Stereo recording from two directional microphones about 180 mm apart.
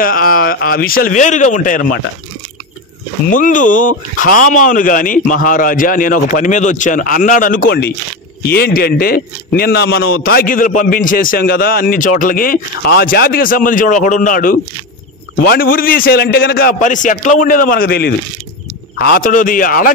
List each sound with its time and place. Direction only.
0.0 s a man's voice: 55° left (ahead or behind)
3.3 s a man's voice: 45° left (ahead or behind)
8.5 s a man's voice: 60° left (ahead or behind)